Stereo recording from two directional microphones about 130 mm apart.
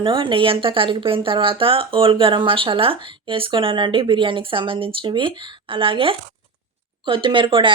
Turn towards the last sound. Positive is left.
turn(degrees=-40)  # may be behind; listen again after turning